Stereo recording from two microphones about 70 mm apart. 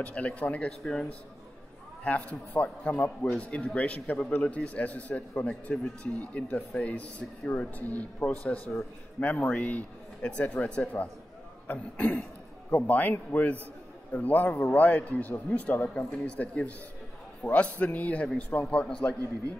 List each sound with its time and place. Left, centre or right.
0.0 s a man's voice: centre